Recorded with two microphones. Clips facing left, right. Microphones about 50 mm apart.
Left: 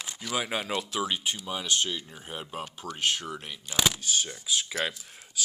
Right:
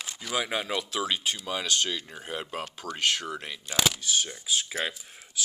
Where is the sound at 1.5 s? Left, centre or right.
Right.